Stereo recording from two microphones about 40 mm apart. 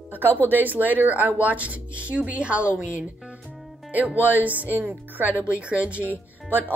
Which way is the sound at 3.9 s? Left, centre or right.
Right.